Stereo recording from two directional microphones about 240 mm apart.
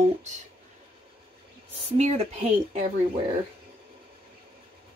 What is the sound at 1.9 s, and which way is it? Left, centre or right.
Speech, right.